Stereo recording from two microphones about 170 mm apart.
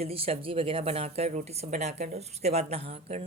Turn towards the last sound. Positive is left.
turn(degrees=-40)  # may be behind; listen again after turning